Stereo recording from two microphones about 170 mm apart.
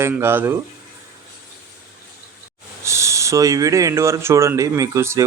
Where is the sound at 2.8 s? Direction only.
15° right (ahead or behind).